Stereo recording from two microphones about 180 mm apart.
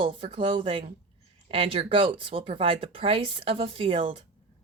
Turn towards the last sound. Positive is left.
turn(degrees=-30)  # may be behind; listen again after turning